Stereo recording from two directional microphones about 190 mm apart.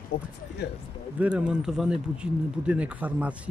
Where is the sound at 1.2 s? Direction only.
5° right (ahead or behind).